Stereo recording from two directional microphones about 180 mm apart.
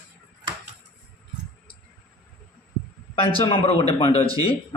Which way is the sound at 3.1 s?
30° left (ahead or behind).